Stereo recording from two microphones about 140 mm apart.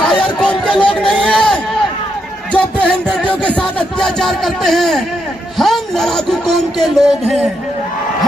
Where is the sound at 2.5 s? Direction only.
5° left (ahead or behind).